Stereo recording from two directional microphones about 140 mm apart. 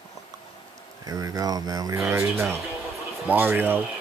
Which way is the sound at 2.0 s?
15° right (ahead or behind).